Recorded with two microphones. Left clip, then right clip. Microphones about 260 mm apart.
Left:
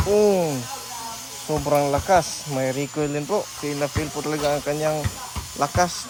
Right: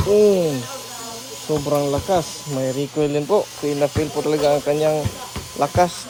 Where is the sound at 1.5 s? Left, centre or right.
Centre.